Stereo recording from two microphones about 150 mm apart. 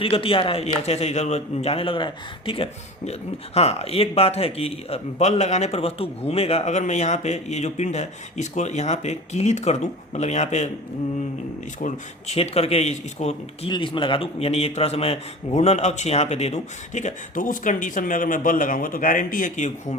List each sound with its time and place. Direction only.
0.0 s a man's voice: 35° left (ahead or behind)
11.8 s speech: 50° left (ahead or behind)
13.7 s speech: 35° left (ahead or behind); by 20.0 s 55° left (ahead or behind)